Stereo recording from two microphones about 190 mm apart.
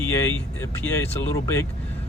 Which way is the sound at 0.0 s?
15° left (ahead or behind).